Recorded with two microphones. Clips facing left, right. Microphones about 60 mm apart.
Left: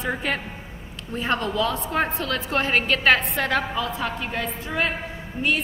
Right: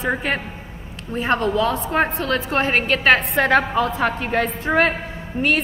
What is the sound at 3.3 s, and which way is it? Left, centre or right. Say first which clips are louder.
A woman's voice: right 7 dB; right.